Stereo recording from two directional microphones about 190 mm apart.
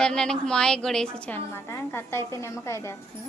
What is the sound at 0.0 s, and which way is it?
A woman's voice, 5° left (ahead or behind).